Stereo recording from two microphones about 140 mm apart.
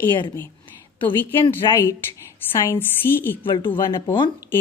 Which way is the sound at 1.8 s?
20° left (ahead or behind).